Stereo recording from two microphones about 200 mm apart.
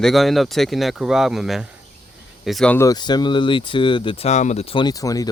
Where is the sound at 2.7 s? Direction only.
15° left (ahead or behind).